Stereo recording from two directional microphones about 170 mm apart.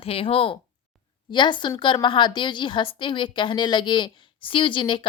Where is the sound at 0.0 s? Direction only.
35° left (ahead or behind).